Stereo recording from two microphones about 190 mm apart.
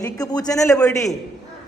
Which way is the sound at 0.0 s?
20° left (ahead or behind).